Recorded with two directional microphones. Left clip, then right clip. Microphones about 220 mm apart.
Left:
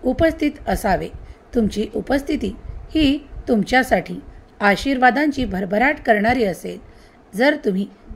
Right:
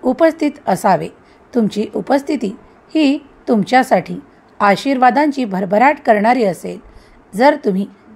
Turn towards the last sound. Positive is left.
turn(degrees=-10)  # may be behind; listen again after turning